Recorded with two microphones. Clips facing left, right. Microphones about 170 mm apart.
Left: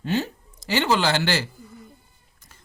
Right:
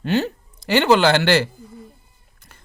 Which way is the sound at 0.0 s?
65° right (ahead or behind).